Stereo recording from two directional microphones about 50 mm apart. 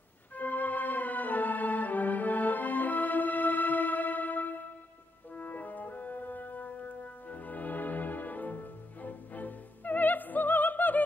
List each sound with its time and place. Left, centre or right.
0.4 s music: left
9.0 s opera: left